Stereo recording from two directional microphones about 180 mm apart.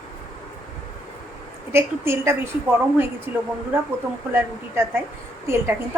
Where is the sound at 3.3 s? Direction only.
30° left (ahead or behind).